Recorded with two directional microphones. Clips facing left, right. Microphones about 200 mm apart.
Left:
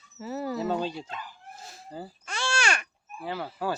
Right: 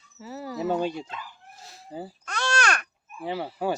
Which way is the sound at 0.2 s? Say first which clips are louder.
Left 4 dB; 55° left (ahead or behind).